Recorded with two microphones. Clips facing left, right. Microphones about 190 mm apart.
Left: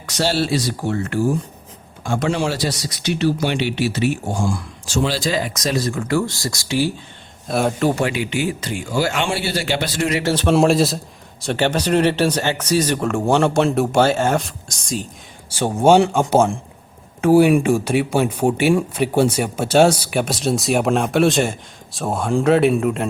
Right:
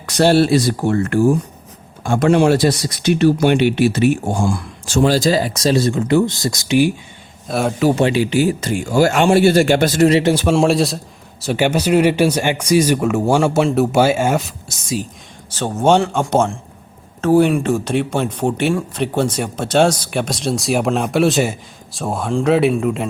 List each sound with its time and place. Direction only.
0.0 s speech: 55° right (ahead or behind); by 6.9 s 20° right (ahead or behind)
7.4 s speech: centre (ahead or behind)
7.9 s speech: 30° right (ahead or behind); by 10.1 s 45° right (ahead or behind)
10.1 s speech: 25° right (ahead or behind)
10.5 s speech: centre (ahead or behind)
15.4 s speech: 10° left (ahead or behind)